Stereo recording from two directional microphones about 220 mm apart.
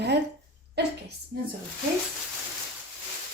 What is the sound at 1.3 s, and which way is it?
Speech, 45° right (ahead or behind).